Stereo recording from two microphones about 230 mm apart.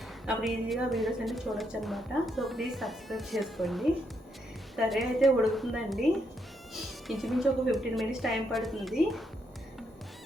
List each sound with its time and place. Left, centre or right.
0.3 s a woman's voice: centre
4.9 s a woman's voice: centre
7.1 s a woman's voice: centre